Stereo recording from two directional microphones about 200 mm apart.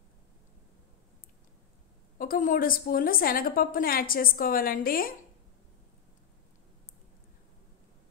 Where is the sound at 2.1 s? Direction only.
45° left (ahead or behind).